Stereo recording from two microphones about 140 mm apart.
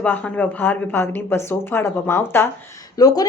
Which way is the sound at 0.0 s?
10° left (ahead or behind).